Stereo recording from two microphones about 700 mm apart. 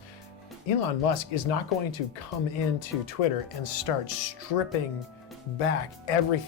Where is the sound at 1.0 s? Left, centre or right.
Left.